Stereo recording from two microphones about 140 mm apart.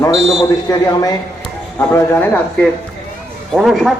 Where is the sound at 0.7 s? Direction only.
30° left (ahead or behind).